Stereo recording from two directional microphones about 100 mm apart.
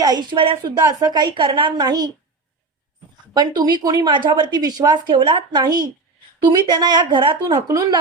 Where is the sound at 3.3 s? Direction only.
45° right (ahead or behind).